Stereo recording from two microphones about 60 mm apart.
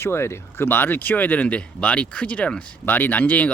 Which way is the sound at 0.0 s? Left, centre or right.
Left.